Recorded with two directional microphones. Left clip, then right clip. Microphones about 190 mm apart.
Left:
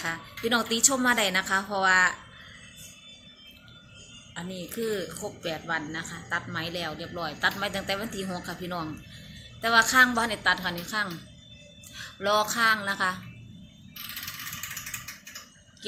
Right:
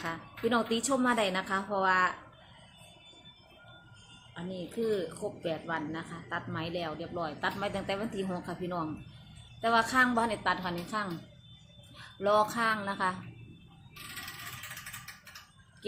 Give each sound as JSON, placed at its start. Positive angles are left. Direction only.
{"t": 0.0, "sound": "a woman's voice", "side_deg": 0}
{"t": 4.4, "sound": "a woman's voice", "side_deg": 0}